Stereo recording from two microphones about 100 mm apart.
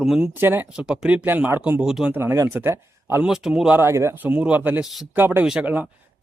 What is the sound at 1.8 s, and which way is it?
Speech, 5° right (ahead or behind).